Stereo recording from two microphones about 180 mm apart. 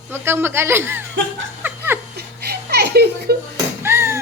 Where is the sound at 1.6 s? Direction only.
10° right (ahead or behind).